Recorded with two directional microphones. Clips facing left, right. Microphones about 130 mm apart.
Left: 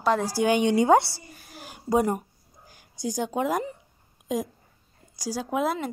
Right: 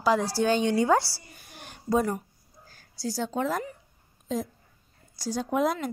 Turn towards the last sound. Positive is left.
turn(degrees=5)  # may be behind; listen again after turning